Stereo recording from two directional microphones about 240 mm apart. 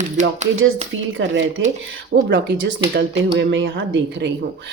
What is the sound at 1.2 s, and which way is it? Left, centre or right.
Speech, right.